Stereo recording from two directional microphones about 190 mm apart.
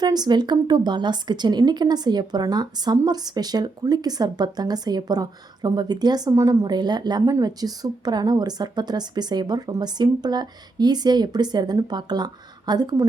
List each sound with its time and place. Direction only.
0.0 s speech: 20° right (ahead or behind)